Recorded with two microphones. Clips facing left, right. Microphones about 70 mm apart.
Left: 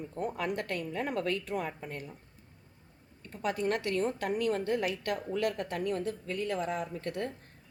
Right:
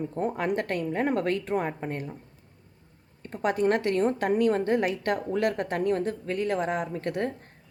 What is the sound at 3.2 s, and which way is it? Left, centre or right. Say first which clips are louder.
Speech: right 7 dB; right.